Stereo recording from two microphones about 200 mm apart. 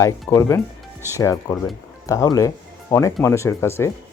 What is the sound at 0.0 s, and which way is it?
Speech, 15° left (ahead or behind).